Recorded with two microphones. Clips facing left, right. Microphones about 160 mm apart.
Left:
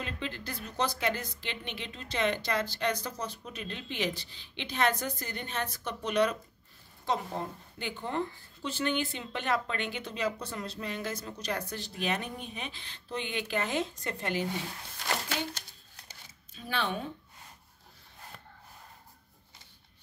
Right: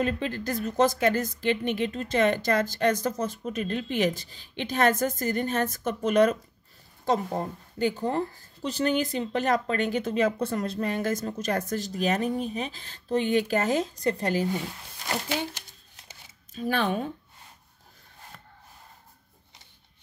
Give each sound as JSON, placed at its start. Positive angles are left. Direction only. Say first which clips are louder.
{"t": 0.0, "sound": "a woman's voice", "louder": "right 10 dB", "side_deg": -45}
{"t": 16.5, "sound": "a woman's voice", "louder": "right 7 dB", "side_deg": -45}